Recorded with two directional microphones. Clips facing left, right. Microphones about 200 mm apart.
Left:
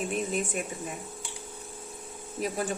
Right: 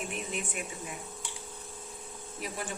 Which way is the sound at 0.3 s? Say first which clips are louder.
Left 6 dB; 40° left (ahead or behind).